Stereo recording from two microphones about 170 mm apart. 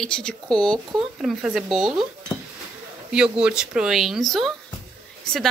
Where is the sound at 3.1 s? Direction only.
5° right (ahead or behind).